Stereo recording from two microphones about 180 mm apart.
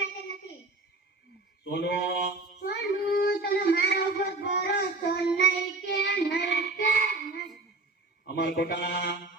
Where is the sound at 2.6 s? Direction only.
60° left (ahead or behind).